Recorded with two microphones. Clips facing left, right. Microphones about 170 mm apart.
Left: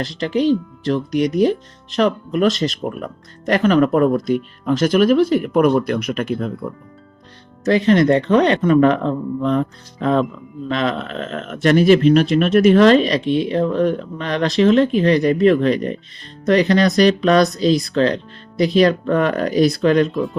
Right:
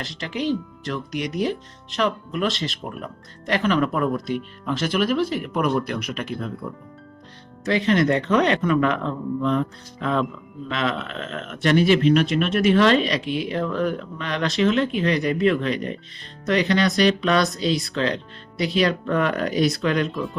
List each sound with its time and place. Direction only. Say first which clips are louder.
0.0 s speech: left 9 dB; 35° left (ahead or behind)
7.6 s speech: left 6 dB; 40° left (ahead or behind)